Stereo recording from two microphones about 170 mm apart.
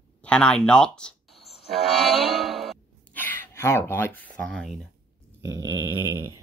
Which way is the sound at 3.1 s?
10° left (ahead or behind).